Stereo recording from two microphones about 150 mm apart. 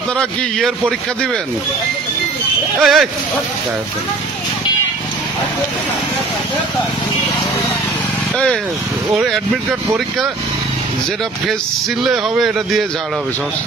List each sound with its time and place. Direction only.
0.2 s a man's voice: 5° left (ahead or behind)
2.8 s a man's voice: centre (ahead or behind)
9.1 s a man's voice: centre (ahead or behind)
12.0 s a man's voice: centre (ahead or behind)